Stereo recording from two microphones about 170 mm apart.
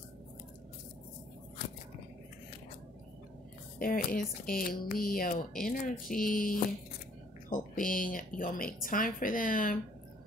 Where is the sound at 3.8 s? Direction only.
55° left (ahead or behind).